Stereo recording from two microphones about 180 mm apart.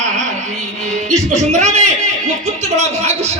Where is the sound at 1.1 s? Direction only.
40° right (ahead or behind).